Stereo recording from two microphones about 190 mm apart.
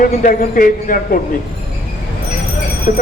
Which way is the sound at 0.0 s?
45° left (ahead or behind).